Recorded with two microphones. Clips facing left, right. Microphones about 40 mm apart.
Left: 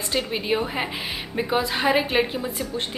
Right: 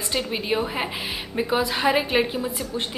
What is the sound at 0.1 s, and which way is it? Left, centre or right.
A woman's voice, centre.